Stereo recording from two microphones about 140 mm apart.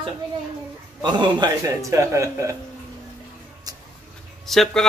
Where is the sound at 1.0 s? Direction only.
30° right (ahead or behind).